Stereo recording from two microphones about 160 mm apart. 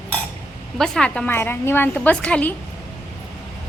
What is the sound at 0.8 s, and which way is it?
Speech, 5° left (ahead or behind).